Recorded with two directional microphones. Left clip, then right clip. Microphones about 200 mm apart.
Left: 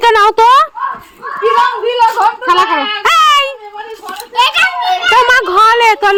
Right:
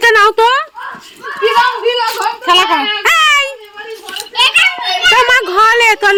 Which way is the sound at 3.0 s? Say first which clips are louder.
Left 2 dB; 10° left (ahead or behind).